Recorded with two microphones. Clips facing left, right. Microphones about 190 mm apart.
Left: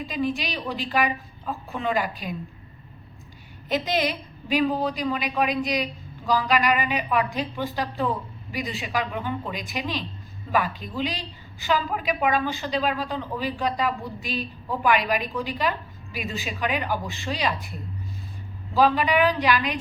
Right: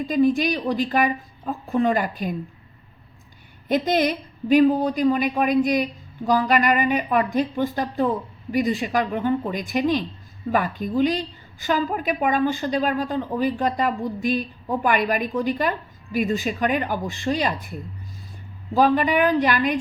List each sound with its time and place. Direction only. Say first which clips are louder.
0.1 s a woman's voice: right 9 dB; 50° right (ahead or behind)
3.7 s a woman's voice: right 5 dB; 50° right (ahead or behind)
18.7 s a woman's voice: right 2 dB; 50° right (ahead or behind)